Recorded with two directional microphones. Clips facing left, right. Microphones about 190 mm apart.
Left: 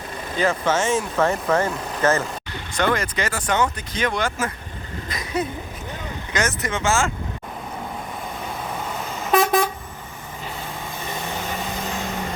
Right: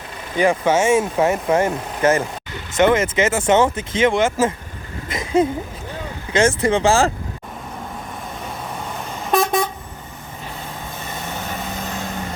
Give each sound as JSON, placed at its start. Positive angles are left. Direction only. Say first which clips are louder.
{"t": 0.3, "sound": "speech", "louder": "right 5 dB", "side_deg": -15}
{"t": 5.0, "sound": "a sound", "louder": "right 8 dB", "side_deg": -25}
{"t": 6.3, "sound": "speech", "louder": "right 9 dB", "side_deg": -30}
{"t": 9.3, "sound": "vehicle", "louder": "even", "side_deg": 0}